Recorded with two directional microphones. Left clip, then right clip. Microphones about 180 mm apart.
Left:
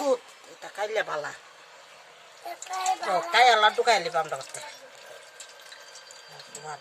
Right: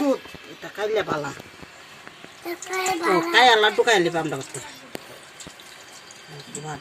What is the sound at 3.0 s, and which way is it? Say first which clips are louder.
Speech: right 4 dB; 30° right (ahead or behind).